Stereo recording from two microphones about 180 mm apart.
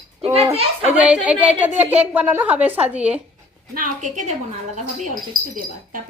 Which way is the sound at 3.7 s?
45° right (ahead or behind).